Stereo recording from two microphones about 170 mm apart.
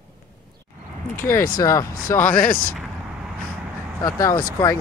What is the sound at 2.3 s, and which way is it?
Speech, 55° left (ahead or behind).